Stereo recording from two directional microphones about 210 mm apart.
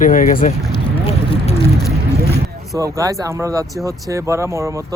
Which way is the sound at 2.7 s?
15° right (ahead or behind).